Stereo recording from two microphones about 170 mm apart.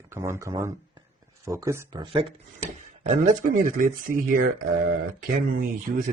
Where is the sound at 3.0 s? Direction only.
45° right (ahead or behind).